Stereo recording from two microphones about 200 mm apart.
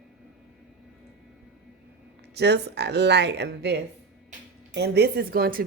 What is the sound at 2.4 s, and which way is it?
A woman's voice, 55° right (ahead or behind).